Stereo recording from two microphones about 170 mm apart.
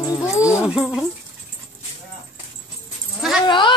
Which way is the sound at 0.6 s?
5° right (ahead or behind).